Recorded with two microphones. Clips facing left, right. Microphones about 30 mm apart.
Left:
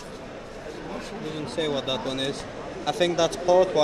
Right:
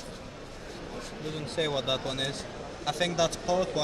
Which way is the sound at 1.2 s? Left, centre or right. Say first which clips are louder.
Left 3 dB; centre.